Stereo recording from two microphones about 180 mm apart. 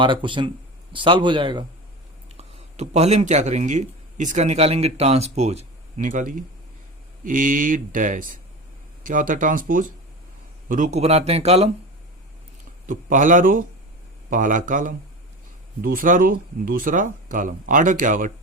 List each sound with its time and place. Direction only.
0.0 s speech: 25° right (ahead or behind)
2.3 s speech: 40° right (ahead or behind)
12.8 s speech: 45° right (ahead or behind)